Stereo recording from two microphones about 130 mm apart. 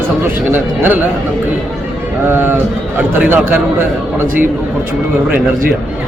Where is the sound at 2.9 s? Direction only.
15° right (ahead or behind).